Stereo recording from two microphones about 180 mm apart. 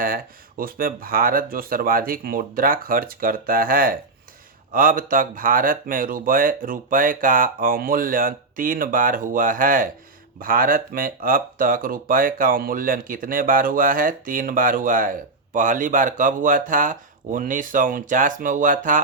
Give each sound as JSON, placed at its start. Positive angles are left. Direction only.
{"t": 0.0, "sound": "speech", "side_deg": -55}